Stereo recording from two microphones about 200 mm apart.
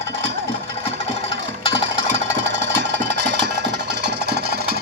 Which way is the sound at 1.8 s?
70° right (ahead or behind).